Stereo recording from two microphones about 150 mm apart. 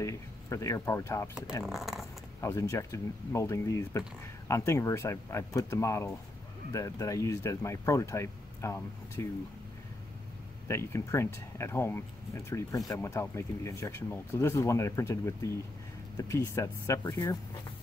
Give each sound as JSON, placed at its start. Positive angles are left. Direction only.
{"t": 0.0, "sound": "speech", "side_deg": 20}
{"t": 1.7, "sound": "speech", "side_deg": 0}
{"t": 2.4, "sound": "speech", "side_deg": 20}
{"t": 10.7, "sound": "speech", "side_deg": 20}